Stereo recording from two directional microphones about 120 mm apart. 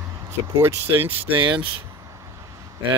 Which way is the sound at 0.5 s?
20° right (ahead or behind).